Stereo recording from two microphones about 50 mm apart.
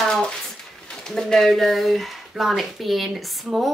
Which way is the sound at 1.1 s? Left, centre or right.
Centre.